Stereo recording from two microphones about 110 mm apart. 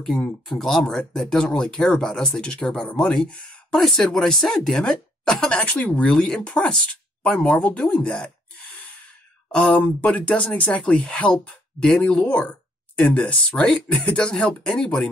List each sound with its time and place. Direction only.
0.0 s speech: 5° left (ahead or behind)